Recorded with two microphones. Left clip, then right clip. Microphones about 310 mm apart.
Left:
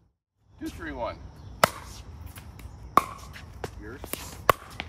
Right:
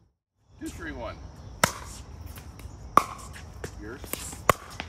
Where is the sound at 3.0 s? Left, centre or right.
Centre.